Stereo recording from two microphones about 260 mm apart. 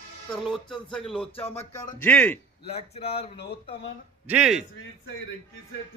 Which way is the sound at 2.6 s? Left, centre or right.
Left.